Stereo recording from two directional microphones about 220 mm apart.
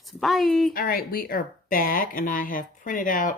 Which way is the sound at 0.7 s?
40° left (ahead or behind).